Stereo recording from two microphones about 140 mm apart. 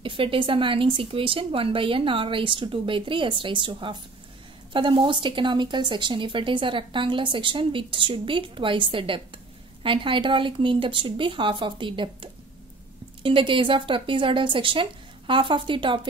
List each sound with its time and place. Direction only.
0.0 s a woman's voice: 40° right (ahead or behind)